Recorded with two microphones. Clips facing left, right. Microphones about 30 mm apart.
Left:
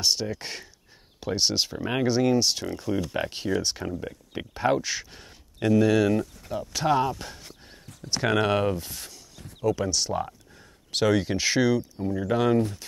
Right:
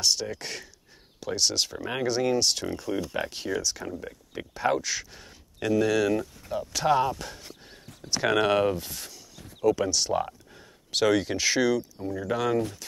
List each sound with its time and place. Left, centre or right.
0.0 s speech: centre